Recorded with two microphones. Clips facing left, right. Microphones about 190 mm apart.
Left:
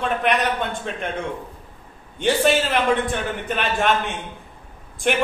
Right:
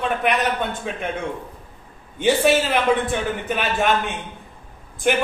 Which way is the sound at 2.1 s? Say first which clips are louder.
Right 1 dB; 5° right (ahead or behind).